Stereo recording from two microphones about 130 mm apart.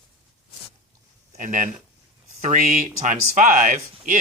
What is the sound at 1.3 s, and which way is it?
Speech, 80° right.